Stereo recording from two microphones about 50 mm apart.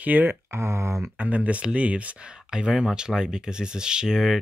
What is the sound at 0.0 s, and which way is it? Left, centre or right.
Speech, right.